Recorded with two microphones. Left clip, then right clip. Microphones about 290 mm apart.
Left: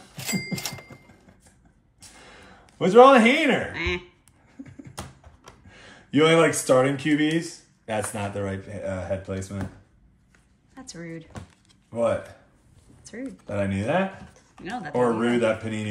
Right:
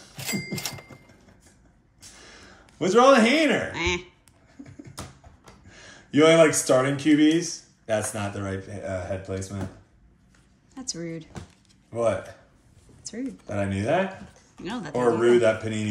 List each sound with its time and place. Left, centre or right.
0.1 s a sound: centre
2.8 s speech: left
3.7 s speech: centre
5.7 s speech: left
10.8 s speech: centre
11.9 s speech: left
13.0 s a sound: centre
13.5 s speech: left
14.6 s speech: centre
15.1 s speech: left